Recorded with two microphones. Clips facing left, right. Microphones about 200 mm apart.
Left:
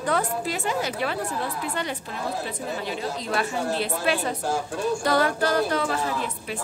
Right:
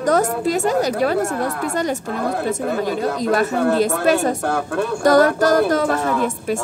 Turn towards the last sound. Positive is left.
turn(degrees=-50)  # may be behind; listen again after turning